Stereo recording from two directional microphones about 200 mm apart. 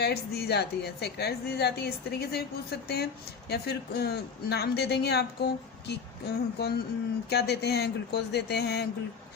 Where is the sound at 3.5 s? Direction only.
50° left (ahead or behind).